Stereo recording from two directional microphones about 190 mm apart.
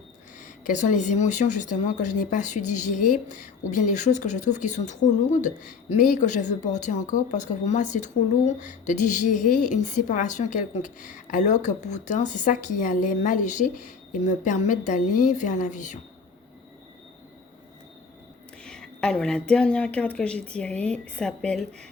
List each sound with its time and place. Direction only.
0.4 s speech: 40° left (ahead or behind)
18.6 s a woman's voice: 5° left (ahead or behind)